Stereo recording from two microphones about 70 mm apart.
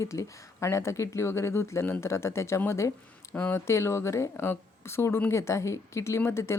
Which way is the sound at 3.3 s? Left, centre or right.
Left.